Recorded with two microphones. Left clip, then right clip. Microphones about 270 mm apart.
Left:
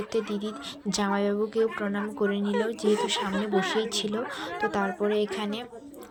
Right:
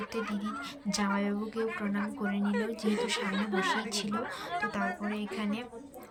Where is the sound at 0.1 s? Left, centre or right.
Centre.